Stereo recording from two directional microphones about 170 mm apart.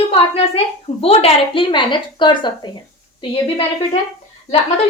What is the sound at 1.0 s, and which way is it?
A woman's voice, 35° left (ahead or behind).